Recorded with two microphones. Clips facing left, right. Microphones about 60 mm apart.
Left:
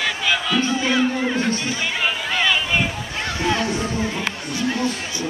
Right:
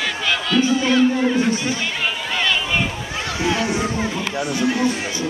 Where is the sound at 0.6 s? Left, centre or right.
Centre.